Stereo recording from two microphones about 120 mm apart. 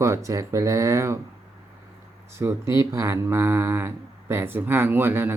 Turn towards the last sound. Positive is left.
turn(degrees=-20)  # may be behind; listen again after turning